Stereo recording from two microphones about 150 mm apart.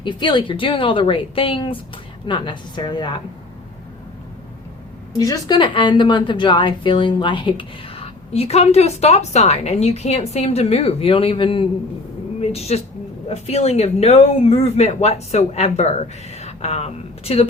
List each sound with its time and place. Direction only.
0.0 s a woman's voice: 30° left (ahead or behind)
5.1 s a woman's voice: 25° left (ahead or behind); by 17.4 s 45° left (ahead or behind)